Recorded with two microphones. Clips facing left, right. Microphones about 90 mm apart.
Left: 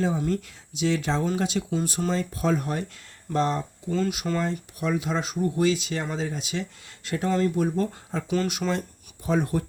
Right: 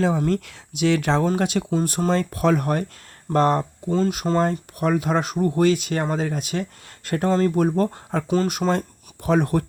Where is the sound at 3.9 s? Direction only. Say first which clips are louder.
Right 5 dB; 40° right (ahead or behind); by 8.2 s 60° right (ahead or behind).